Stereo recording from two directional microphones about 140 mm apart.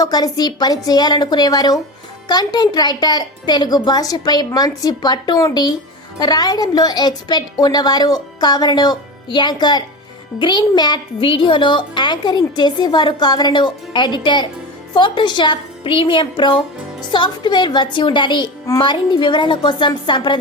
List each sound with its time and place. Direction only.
0.0 s a woman's voice: 30° left (ahead or behind)